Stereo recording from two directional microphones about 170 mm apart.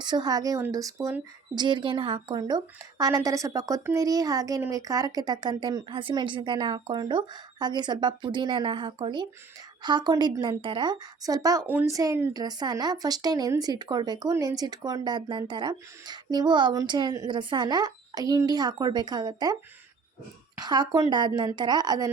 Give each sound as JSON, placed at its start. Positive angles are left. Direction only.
{"t": 0.0, "sound": "speech", "side_deg": -25}
{"t": 1.5, "sound": "speech", "side_deg": -25}
{"t": 11.6, "sound": "speech", "side_deg": -10}
{"t": 20.6, "sound": "speech", "side_deg": -25}